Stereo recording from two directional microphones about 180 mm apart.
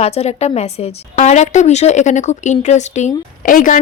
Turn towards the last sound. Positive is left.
turn(degrees=45)  # may be behind; listen again after turning